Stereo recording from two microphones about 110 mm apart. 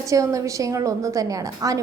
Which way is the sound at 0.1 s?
30° right (ahead or behind).